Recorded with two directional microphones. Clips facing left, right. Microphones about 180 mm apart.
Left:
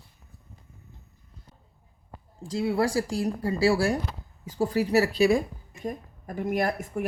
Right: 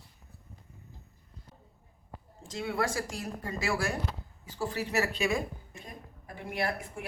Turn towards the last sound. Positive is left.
turn(degrees=45)  # may be behind; listen again after turning